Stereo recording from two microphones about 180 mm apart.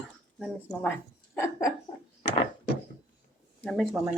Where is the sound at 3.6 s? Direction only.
Centre (ahead or behind).